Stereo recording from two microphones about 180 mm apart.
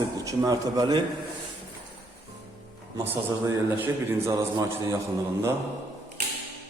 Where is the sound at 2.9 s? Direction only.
15° right (ahead or behind).